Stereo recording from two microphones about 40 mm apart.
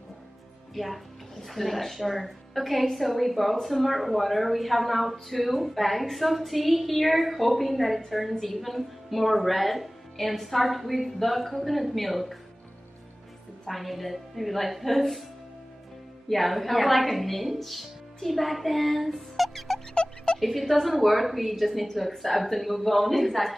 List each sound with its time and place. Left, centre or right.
0.7 s speech: centre
13.7 s speech: centre
16.3 s a woman's voice: centre
19.9 s a sound: left
20.3 s speech: centre